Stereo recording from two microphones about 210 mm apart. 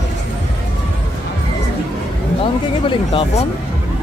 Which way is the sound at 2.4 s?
25° left (ahead or behind).